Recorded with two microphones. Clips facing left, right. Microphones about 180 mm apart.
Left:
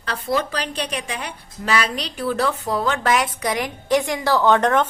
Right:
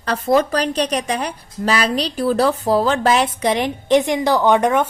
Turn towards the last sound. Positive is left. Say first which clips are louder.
# right 2 dB
turn(degrees=-10)  # may be behind; listen again after turning